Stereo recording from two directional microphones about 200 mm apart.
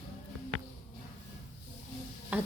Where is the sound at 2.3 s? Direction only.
10° right (ahead or behind).